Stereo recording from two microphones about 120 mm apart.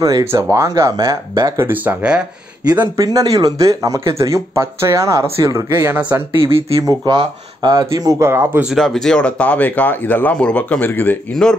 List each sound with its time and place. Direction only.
0.0 s speech: 25° right (ahead or behind)
1.6 s speech: 15° right (ahead or behind)
2.7 s speech: 35° right (ahead or behind); by 6.4 s 15° right (ahead or behind)
7.1 s speech: 35° right (ahead or behind); by 8.6 s 20° right (ahead or behind)
8.6 s speech: centre (ahead or behind)